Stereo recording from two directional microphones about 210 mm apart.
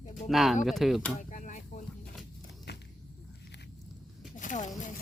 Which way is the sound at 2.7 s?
55° left (ahead or behind).